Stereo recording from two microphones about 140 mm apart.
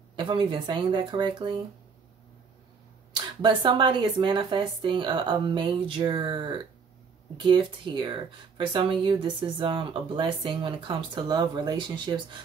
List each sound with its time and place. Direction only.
0.1 s speech: 35° right (ahead or behind)
3.1 s speech: 35° right (ahead or behind)